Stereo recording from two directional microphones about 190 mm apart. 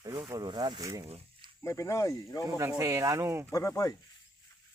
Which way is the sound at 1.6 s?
15° left (ahead or behind).